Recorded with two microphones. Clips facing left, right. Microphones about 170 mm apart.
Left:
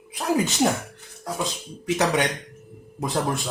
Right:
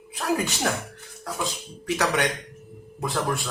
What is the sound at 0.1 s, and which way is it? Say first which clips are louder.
Speech: left 2 dB; 20° left (ahead or behind).